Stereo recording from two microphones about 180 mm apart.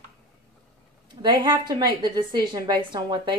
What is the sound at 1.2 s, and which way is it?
A woman's voice, 25° right (ahead or behind).